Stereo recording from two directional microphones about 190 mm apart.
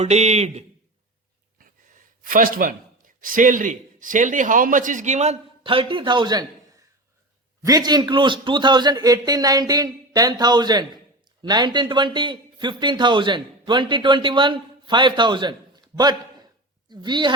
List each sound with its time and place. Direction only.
0.0 s a man's voice: 35° right (ahead or behind)
1.5 s a man's voice: 45° right (ahead or behind); by 17.3 s 25° right (ahead or behind)